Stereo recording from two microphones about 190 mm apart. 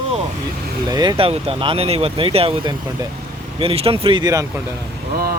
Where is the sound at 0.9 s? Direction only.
20° right (ahead or behind).